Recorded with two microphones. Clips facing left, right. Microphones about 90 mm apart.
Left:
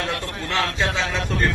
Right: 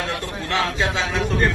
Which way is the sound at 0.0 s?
Centre (ahead or behind).